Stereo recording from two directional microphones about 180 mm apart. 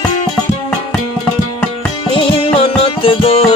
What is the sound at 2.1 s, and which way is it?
Music, 30° left (ahead or behind).